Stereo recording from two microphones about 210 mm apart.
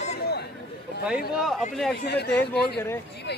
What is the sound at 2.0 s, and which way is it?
Speech, 55° left (ahead or behind).